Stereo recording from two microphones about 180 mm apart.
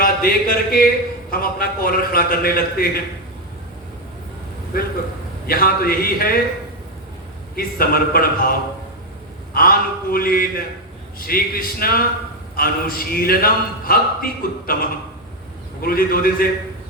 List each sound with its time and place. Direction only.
0.0 s a man's voice: 55° left (ahead or behind)
5.5 s a man's voice: 55° left (ahead or behind)
7.5 s a man's voice: 55° left (ahead or behind)
9.6 s a man's voice: 55° left (ahead or behind)